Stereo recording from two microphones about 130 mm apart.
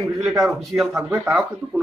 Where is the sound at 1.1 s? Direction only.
20° right (ahead or behind).